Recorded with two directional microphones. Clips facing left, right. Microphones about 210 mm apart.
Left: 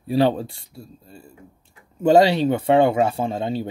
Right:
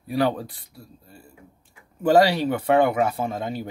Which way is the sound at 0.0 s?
30° left (ahead or behind).